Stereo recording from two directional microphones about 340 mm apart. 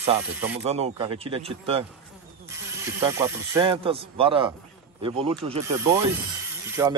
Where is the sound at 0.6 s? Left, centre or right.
Centre.